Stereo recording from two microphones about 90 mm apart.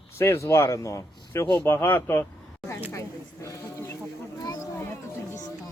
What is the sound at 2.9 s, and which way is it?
Speech, 35° left (ahead or behind).